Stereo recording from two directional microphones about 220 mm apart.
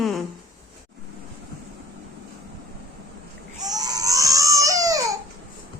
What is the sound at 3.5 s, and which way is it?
Crying, 15° right (ahead or behind).